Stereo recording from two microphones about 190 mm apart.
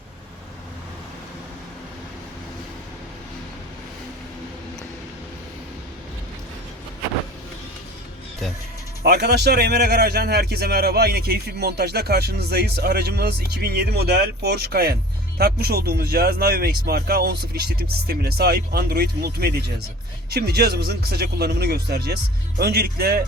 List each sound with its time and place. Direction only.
9.0 s a man's voice: 60° right (ahead or behind)